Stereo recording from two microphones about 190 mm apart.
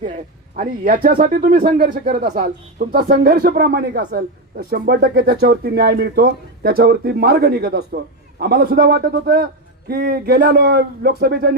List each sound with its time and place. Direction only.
0.5 s speech: 45° right (ahead or behind)